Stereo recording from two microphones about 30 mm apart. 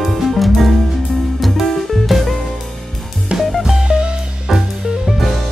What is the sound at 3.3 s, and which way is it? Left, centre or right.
Music, right.